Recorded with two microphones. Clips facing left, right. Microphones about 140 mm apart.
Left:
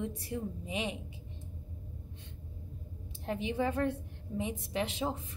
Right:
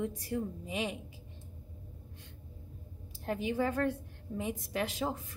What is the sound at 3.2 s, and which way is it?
A woman's voice, 25° left (ahead or behind).